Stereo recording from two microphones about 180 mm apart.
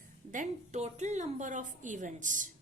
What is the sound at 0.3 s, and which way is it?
A woman's voice, 45° right (ahead or behind).